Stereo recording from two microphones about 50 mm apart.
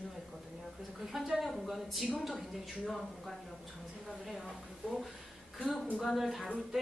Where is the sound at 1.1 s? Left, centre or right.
Centre.